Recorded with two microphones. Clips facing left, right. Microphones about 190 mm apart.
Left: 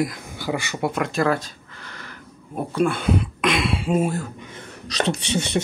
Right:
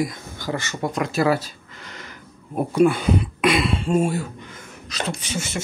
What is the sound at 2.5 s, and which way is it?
Speech, 5° right (ahead or behind).